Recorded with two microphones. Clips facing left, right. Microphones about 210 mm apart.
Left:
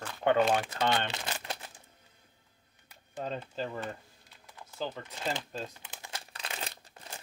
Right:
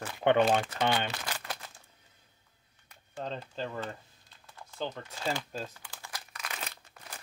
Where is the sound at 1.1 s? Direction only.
25° left (ahead or behind).